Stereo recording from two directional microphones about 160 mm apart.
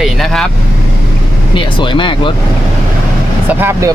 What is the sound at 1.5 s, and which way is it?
Speech, 30° left (ahead or behind).